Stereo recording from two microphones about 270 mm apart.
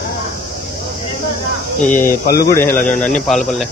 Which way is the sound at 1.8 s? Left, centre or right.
Left.